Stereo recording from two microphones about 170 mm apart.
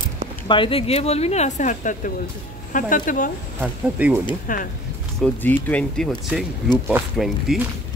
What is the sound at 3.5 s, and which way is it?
Speech, 10° right (ahead or behind).